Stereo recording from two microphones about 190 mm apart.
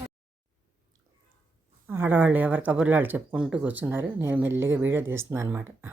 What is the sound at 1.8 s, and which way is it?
Speech, 10° right (ahead or behind).